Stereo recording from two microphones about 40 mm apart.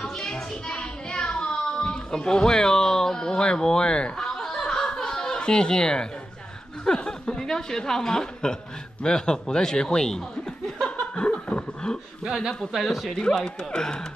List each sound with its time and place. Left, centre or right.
0.0 s music: centre
4.2 s snicker: centre
6.8 s a woman's voice: centre
11.1 s roar: left
12.3 s speech: centre
13.2 s speech: centre